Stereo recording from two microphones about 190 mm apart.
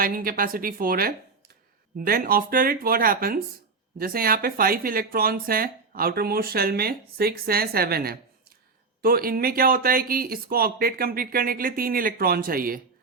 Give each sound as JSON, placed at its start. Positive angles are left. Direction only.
{"t": 0.0, "sound": "speech", "side_deg": -50}